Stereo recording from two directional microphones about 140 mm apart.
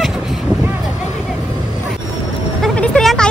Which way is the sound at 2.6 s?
10° left (ahead or behind).